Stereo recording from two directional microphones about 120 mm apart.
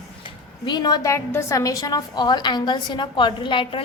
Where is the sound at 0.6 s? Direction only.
35° left (ahead or behind).